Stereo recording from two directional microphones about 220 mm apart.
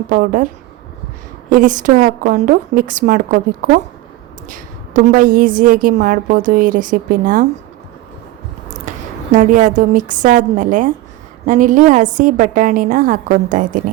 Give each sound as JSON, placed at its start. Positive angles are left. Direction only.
{"t": 0.1, "sound": "a woman's voice", "side_deg": -40}
{"t": 1.5, "sound": "a woman's voice", "side_deg": -35}
{"t": 8.9, "sound": "a woman's voice", "side_deg": -35}